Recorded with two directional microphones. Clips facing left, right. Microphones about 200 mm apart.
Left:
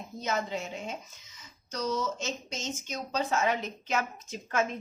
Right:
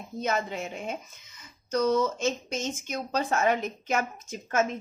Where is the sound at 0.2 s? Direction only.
55° right (ahead or behind).